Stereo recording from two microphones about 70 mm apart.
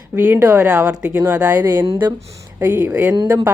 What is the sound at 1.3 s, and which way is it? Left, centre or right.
Speech, centre.